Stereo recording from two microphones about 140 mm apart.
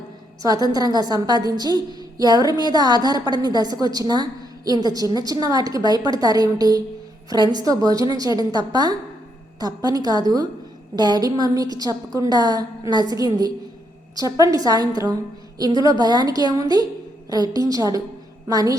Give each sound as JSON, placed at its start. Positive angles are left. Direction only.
{"t": 0.4, "sound": "a woman's voice", "side_deg": -25}